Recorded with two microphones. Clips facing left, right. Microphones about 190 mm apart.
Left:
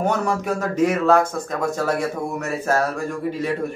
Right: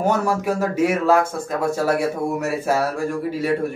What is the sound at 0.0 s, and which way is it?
A man's voice, 5° right (ahead or behind).